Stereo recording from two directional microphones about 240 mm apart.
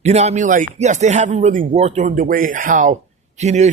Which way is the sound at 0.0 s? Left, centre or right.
Right.